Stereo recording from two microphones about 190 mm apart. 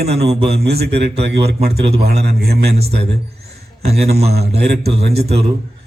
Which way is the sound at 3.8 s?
55° right (ahead or behind).